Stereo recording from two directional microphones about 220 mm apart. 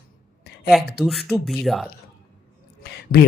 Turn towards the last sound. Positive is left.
turn(degrees=45)  # may be behind; listen again after turning